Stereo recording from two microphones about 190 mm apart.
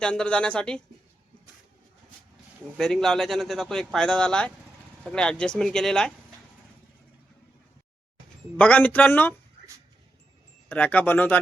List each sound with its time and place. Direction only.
0.0 s speech: 5° left (ahead or behind)
2.7 s speech: centre (ahead or behind)
8.5 s speech: 10° left (ahead or behind)
10.7 s speech: 10° left (ahead or behind)